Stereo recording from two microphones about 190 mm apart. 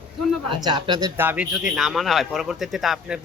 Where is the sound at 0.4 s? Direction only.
25° right (ahead or behind).